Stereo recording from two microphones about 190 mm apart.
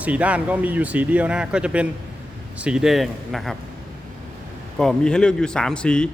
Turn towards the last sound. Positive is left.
turn(degrees=5)  # may be behind; listen again after turning